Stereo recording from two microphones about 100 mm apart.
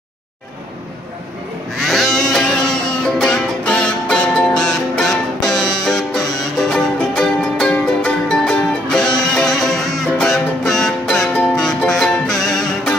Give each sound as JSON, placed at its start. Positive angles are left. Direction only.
{"t": 1.8, "sound": "music", "side_deg": 0}